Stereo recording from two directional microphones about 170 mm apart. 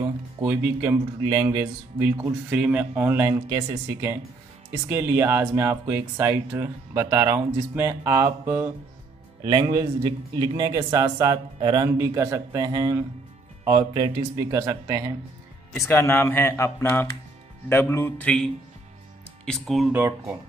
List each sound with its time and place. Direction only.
0.4 s a man's voice: 10° right (ahead or behind)
15.8 s speech: 15° left (ahead or behind)
19.9 s speech: 10° right (ahead or behind)